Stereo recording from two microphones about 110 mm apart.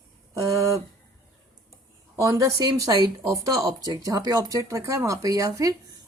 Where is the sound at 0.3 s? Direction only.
30° right (ahead or behind).